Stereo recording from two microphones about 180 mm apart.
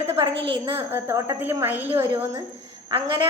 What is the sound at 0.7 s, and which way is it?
Child singing, 10° right (ahead or behind).